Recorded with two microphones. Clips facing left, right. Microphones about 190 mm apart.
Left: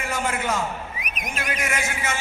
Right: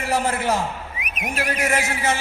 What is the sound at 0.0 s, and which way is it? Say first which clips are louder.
A man's voice: right 4 dB; 35° right (ahead or behind).